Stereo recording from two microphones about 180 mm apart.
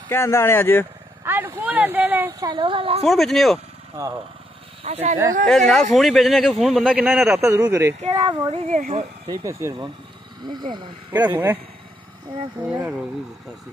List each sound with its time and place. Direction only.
0.1 s speech: 15° left (ahead or behind)
1.2 s speech: 10° right (ahead or behind)
2.4 s speech: 25° right (ahead or behind)
3.0 s a man's voice: centre (ahead or behind)
4.0 s speech: 15° right (ahead or behind)
4.8 s speech: 40° right (ahead or behind)
5.5 s a man's voice: 5° left (ahead or behind)
7.3 s speech: 15° right (ahead or behind)
8.5 s speech: 40° right (ahead or behind)
9.3 s speech: 15° right (ahead or behind)
11.2 s speech: 10° right (ahead or behind)
12.6 s speech: 10° right (ahead or behind)